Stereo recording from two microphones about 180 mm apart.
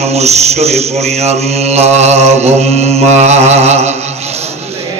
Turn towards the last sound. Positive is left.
turn(degrees=-35)  # may be behind; listen again after turning